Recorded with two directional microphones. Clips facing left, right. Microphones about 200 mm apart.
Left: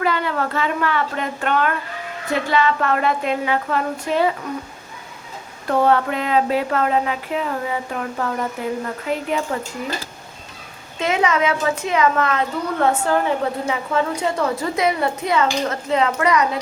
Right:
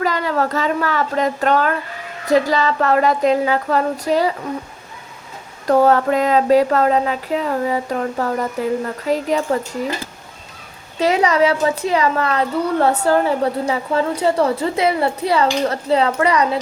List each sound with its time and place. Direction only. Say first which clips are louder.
0.0 s a woman's voice: right 2 dB; 40° right (ahead or behind)
5.6 s a woman's voice: right 4 dB; 40° right (ahead or behind)
10.9 s a woman's voice: right 4 dB; 35° right (ahead or behind)